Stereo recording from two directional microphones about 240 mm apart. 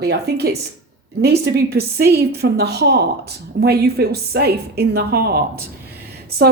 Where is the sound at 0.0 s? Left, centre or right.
Right.